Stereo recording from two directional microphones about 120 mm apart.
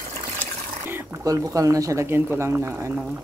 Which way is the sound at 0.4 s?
15° right (ahead or behind).